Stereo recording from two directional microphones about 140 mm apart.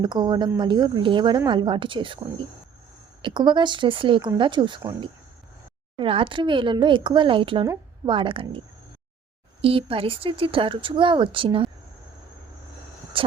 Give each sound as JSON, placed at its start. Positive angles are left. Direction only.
{"t": 0.0, "sound": "speech", "side_deg": -35}
{"t": 3.2, "sound": "speech", "side_deg": -35}
{"t": 6.0, "sound": "speech", "side_deg": -40}
{"t": 13.2, "sound": "a sound", "side_deg": -40}